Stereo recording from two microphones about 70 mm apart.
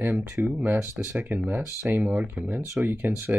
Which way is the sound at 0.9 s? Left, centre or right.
Right.